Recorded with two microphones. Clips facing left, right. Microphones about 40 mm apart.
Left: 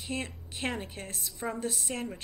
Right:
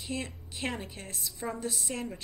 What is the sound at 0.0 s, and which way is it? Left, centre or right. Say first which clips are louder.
A woman's voice: left 1 dB; left.